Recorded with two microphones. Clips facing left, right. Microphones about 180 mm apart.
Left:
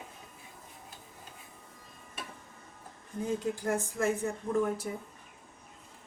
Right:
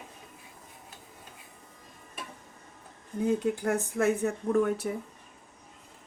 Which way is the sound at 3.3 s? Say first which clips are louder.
Right 4 dB; 65° right (ahead or behind).